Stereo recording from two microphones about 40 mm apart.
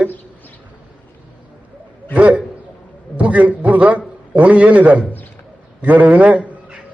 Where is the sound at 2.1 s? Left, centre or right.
Right.